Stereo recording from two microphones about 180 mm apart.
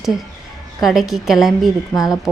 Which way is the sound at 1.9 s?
20° left (ahead or behind).